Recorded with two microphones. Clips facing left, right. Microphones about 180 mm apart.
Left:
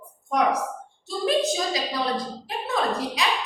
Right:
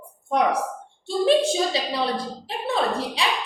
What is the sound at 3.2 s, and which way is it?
Speech, 30° right (ahead or behind).